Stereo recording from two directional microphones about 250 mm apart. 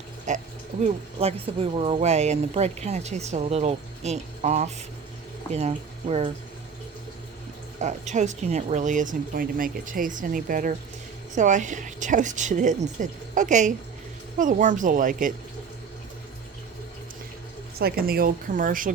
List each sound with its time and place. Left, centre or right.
0.3 s speech: right
7.8 s speech: right
17.7 s speech: right